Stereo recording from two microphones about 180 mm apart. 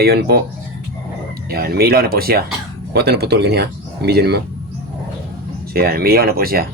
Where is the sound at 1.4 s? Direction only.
60° right (ahead or behind).